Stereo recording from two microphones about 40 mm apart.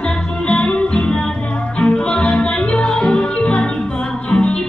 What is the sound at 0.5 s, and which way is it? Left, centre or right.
Music, left.